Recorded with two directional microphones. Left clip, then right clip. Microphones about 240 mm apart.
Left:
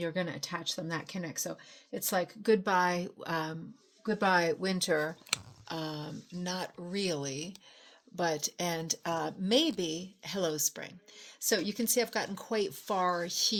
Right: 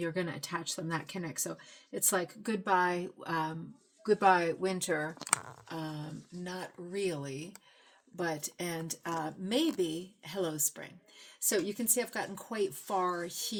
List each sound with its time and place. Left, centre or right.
0.0 s speech: left
5.6 s speech: left